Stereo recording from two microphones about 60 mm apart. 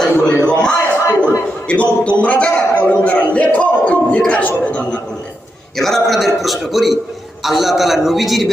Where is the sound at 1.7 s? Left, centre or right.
Centre.